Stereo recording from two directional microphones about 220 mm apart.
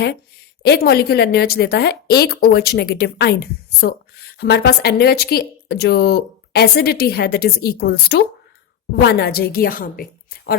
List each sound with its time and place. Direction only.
0.6 s a woman's voice: 45° left (ahead or behind)